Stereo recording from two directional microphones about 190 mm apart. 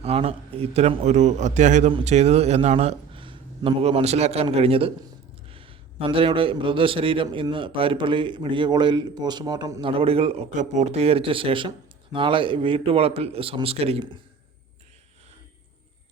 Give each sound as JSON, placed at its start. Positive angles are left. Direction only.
{"t": 0.0, "sound": "a man's voice", "side_deg": -30}